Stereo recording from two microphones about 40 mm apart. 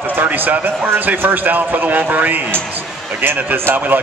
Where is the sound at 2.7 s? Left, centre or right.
Right.